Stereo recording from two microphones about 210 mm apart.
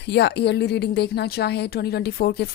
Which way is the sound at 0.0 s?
55° left (ahead or behind).